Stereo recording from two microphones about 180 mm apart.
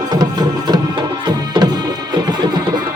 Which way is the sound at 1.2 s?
25° right (ahead or behind).